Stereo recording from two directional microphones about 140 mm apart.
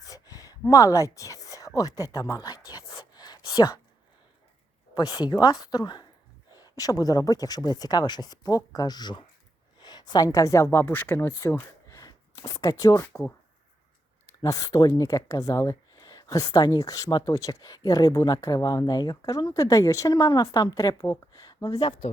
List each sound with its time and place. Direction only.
0.0 s a sound: 25° left (ahead or behind)
4.9 s speech: 25° left (ahead or behind)
14.4 s speech: 25° left (ahead or behind)